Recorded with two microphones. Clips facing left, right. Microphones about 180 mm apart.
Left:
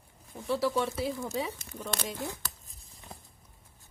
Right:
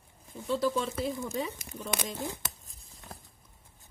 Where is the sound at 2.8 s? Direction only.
Centre (ahead or behind).